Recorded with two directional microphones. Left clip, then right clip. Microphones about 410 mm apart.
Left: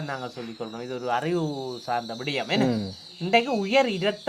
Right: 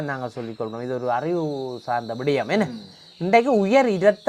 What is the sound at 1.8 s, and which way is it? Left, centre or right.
A man's voice, right.